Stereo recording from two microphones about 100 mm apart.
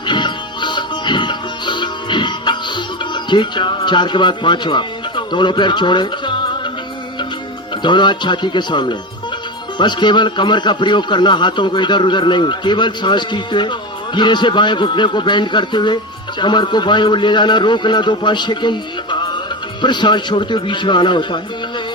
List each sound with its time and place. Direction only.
0.1 s music: 50° left (ahead or behind)
3.2 s a man's voice: 50° left (ahead or behind)
7.8 s speech: 50° left (ahead or behind)